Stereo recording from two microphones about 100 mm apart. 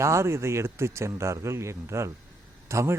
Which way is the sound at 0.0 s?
30° right (ahead or behind).